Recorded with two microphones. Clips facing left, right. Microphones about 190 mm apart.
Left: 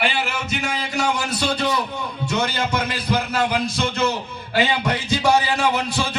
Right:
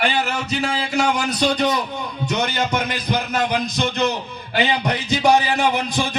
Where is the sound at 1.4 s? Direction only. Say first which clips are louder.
Right 4 dB; 15° right (ahead or behind).